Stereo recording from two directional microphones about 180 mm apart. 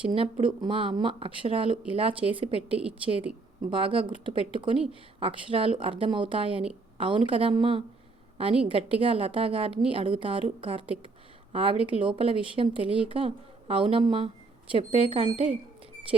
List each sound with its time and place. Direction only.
0.0 s a woman's voice: 30° right (ahead or behind)